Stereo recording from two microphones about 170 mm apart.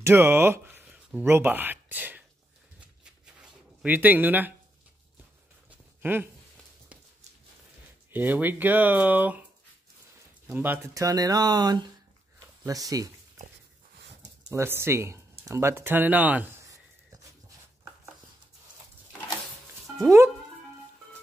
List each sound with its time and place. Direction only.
0.0 s speech: 15° right (ahead or behind)
3.0 s a sound: 5° right (ahead or behind)
5.7 s a sound: 10° right (ahead or behind)
8.1 s speech: 10° right (ahead or behind)
10.4 s speech: 10° right (ahead or behind)
14.5 s speech: 15° right (ahead or behind)